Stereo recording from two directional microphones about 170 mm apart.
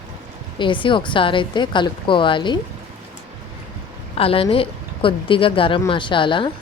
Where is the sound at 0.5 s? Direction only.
30° left (ahead or behind).